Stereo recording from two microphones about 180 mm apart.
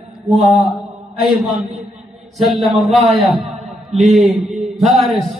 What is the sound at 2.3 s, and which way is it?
Speech, centre (ahead or behind).